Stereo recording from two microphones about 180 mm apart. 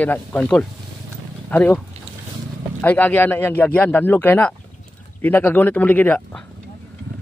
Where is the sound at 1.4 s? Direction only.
10° left (ahead or behind).